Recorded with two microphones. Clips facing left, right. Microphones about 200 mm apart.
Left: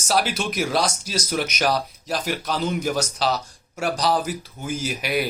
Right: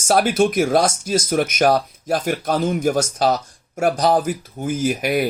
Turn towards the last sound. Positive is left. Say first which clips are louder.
# right 6 dB
turn(degrees=-50)  # may be behind; listen again after turning